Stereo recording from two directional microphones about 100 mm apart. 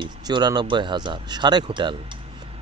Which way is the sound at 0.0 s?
45° right (ahead or behind).